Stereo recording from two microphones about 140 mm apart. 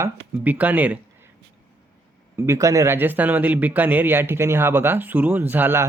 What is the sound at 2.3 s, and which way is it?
Speech, 20° right (ahead or behind).